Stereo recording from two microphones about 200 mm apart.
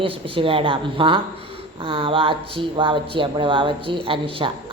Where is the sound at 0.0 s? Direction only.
25° right (ahead or behind).